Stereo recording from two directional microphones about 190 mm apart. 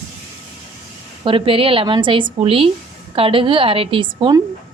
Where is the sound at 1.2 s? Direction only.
25° right (ahead or behind).